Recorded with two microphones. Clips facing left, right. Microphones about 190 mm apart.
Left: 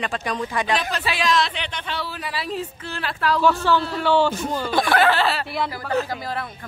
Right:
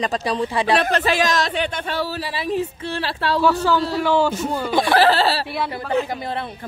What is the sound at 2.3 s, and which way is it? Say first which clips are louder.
Speech: right 3 dB; 25° right (ahead or behind).